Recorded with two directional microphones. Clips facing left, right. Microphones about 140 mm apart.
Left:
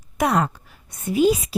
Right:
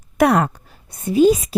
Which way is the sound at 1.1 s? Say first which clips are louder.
Right 4 dB; 40° right (ahead or behind).